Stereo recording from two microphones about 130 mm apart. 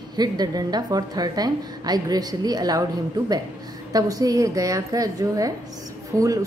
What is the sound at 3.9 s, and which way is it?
A woman's voice, 30° right (ahead or behind).